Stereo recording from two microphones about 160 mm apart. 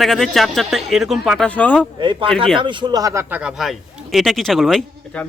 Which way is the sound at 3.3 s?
5° right (ahead or behind).